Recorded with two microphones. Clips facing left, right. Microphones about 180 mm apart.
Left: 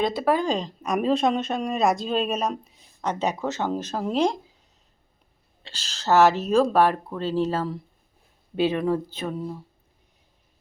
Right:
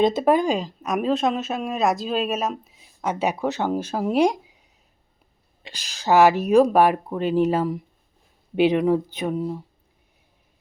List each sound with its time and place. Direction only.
0.0 s speech: 20° right (ahead or behind)
5.6 s speech: 15° right (ahead or behind)